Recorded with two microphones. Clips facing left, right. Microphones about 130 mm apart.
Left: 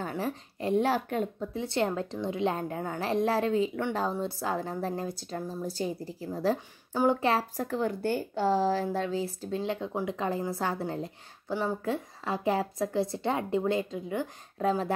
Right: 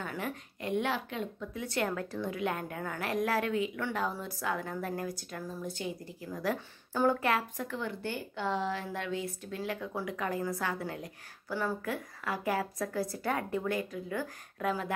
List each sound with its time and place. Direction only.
0.0 s a woman's voice: 30° left (ahead or behind)
1.5 s a woman's voice: 30° left (ahead or behind)
6.9 s a woman's voice: 20° left (ahead or behind)
14.6 s a woman's voice: 30° left (ahead or behind)